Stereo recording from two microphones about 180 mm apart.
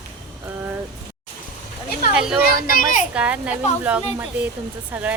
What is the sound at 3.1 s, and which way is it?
Speech, 5° right (ahead or behind).